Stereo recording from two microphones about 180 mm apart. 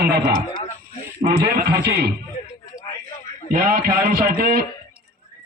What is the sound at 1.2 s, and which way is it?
Speech, 55° right (ahead or behind).